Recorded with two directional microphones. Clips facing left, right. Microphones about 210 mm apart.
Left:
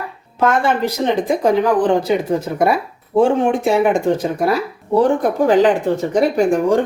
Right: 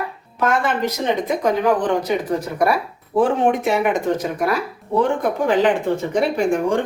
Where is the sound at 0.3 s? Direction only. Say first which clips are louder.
Left 4 dB; 30° left (ahead or behind).